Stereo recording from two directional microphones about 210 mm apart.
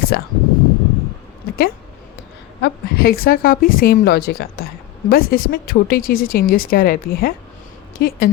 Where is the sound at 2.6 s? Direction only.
45° left (ahead or behind).